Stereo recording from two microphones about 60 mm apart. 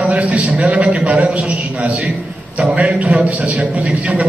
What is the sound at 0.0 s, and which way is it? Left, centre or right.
A man's voice, centre.